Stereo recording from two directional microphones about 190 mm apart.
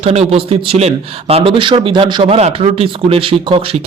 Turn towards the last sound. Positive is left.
turn(degrees=-30)  # may be behind; listen again after turning